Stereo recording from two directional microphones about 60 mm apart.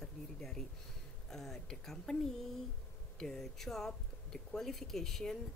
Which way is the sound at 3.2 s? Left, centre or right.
Centre.